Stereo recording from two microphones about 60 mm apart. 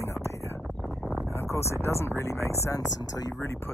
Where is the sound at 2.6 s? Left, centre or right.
Left.